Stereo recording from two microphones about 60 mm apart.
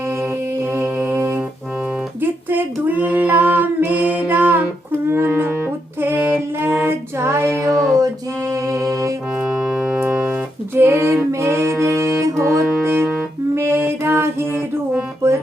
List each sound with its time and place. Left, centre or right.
0.2 s music: right
2.2 s singing: right
4.9 s music: right
6.0 s female singing: right
7.7 s music: centre
7.9 s music: right
9.4 s music: centre
10.1 s music: right
10.8 s music: right
12.8 s music: right